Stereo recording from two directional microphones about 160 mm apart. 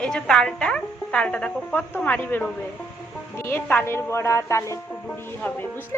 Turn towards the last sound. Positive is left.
turn(degrees=10)  # may be behind; listen again after turning